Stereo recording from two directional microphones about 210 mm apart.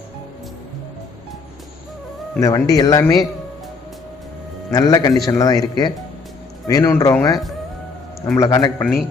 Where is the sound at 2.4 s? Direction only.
15° left (ahead or behind).